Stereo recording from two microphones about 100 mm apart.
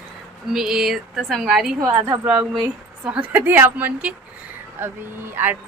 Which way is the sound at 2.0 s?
30° right (ahead or behind).